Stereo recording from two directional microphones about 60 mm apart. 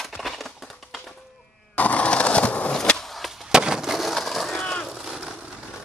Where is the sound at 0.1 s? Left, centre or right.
Centre.